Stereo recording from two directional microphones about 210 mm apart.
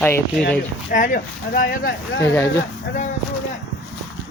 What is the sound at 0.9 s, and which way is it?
Speech, 40° left (ahead or behind).